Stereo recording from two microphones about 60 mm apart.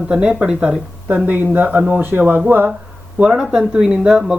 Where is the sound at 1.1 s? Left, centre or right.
Right.